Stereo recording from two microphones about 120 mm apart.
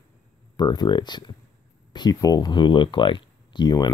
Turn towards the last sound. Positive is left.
turn(degrees=35)  # may be behind; listen again after turning